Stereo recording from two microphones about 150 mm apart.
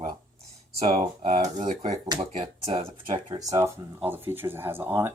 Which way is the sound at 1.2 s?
60° right (ahead or behind).